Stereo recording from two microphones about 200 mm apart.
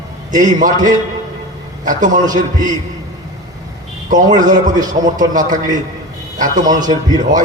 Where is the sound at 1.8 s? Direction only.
40° right (ahead or behind).